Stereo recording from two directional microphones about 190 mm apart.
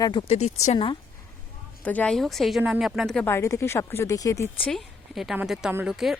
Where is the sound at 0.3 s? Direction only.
35° left (ahead or behind).